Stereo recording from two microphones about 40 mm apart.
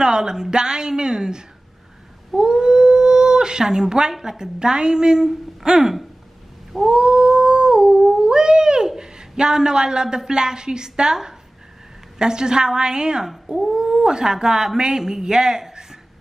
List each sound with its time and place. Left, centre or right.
0.0 s a woman's voice: centre
2.3 s dog: centre
4.1 s a woman's voice: centre
6.9 s cat: centre
12.2 s a woman's voice: centre